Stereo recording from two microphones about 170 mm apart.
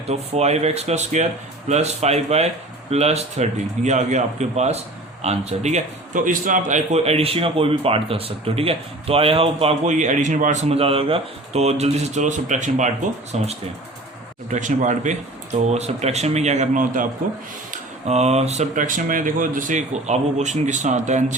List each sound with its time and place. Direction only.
0.1 s a man's voice: 40° right (ahead or behind)
18.0 s speech: 40° right (ahead or behind)